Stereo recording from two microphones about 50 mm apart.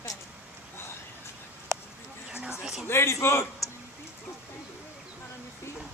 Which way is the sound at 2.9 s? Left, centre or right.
Left.